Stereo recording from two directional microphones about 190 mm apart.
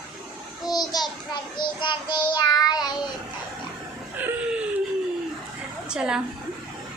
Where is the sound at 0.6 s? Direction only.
20° left (ahead or behind).